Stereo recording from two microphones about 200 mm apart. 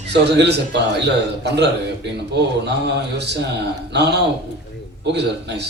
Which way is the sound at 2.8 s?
60° right (ahead or behind).